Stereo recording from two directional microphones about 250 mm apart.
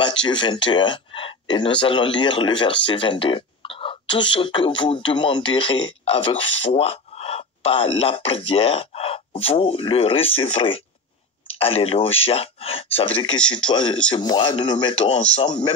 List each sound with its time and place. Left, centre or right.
0.0 s speech: centre